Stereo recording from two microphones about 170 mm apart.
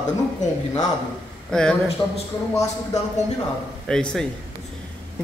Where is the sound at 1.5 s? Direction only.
5° left (ahead or behind).